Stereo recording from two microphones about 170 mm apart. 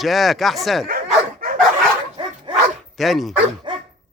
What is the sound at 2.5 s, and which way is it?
Dog, 30° right (ahead or behind).